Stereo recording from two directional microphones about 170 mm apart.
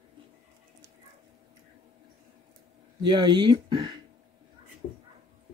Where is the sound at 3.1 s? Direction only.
25° right (ahead or behind).